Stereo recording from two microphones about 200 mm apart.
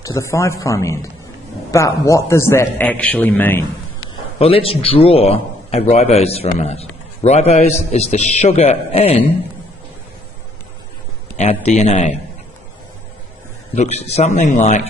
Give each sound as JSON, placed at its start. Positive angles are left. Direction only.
{"t": 0.0, "sound": "a man's voice", "side_deg": 15}
{"t": 4.4, "sound": "a man's voice", "side_deg": 30}
{"t": 11.3, "sound": "a man's voice", "side_deg": 30}
{"t": 13.7, "sound": "a man's voice", "side_deg": 35}